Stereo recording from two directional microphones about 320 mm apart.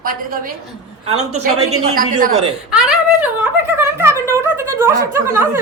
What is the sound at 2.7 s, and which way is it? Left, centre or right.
Speech, centre.